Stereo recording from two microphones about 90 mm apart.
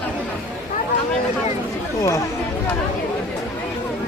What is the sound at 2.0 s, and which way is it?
Speech, 35° left (ahead or behind).